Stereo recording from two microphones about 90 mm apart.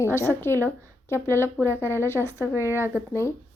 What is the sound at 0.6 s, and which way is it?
A woman's voice, 25° left (ahead or behind).